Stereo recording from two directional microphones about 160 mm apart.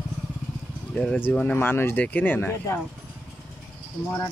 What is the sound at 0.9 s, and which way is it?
Speech, 5° left (ahead or behind).